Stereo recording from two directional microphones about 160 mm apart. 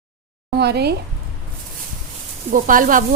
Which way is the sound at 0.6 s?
90° right.